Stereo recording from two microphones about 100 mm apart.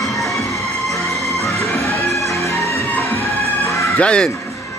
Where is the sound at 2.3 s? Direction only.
30° left (ahead or behind).